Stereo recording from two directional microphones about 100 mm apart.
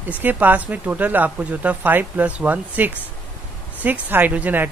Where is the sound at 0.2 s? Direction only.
20° right (ahead or behind).